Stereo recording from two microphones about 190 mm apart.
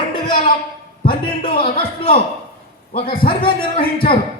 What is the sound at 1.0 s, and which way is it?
Music, 25° left (ahead or behind).